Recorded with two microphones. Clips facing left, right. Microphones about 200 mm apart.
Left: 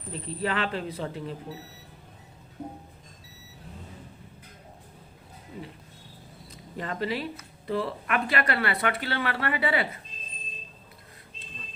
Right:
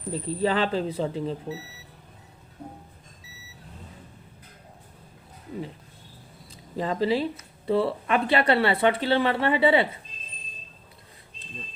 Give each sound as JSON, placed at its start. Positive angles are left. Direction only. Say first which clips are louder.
{"t": 0.1, "sound": "speech", "louder": "right 5 dB", "side_deg": -30}
{"t": 6.7, "sound": "speech", "louder": "right 6 dB", "side_deg": -30}